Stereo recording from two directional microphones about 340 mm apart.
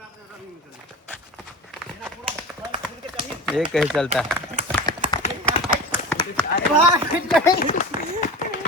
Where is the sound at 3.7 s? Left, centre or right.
Centre.